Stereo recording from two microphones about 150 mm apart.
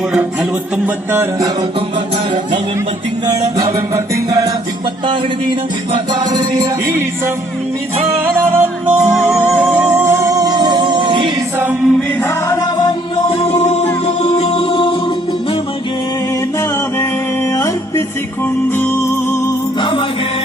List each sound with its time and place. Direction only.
1.1 s music: 20° right (ahead or behind)
3.6 s music: 20° right (ahead or behind)
5.9 s music: 30° right (ahead or behind)
8.2 s music: 10° right (ahead or behind); by 11.3 s 35° right (ahead or behind)
11.6 s chant: 10° right (ahead or behind)
12.5 s music: 25° left (ahead or behind)
17.5 s music: 20° left (ahead or behind)
19.8 s music: 35° left (ahead or behind)